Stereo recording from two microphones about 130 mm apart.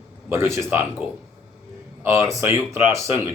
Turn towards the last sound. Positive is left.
turn(degrees=-20)  # may be behind; listen again after turning